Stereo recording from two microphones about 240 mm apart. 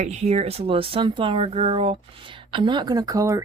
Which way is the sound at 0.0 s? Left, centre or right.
Right.